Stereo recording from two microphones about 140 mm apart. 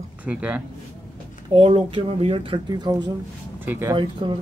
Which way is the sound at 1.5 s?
40° right (ahead or behind).